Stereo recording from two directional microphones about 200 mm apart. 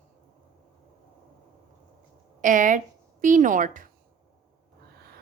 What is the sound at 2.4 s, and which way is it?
A woman's voice, 40° right (ahead or behind).